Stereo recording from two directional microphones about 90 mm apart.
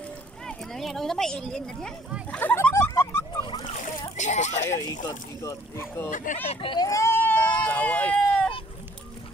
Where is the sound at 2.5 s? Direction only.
30° left (ahead or behind).